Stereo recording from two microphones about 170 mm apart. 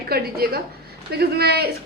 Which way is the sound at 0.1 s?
65° right (ahead or behind).